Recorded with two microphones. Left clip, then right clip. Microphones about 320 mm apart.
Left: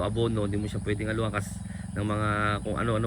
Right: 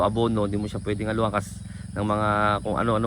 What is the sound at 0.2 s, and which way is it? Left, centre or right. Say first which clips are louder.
Speech: right 4 dB; centre.